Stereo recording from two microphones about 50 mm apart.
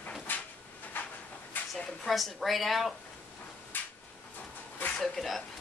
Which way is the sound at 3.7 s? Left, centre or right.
Left.